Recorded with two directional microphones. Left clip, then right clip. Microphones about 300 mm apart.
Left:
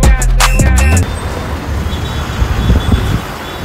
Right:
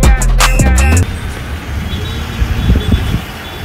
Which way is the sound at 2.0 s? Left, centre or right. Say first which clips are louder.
Left 2 dB; left.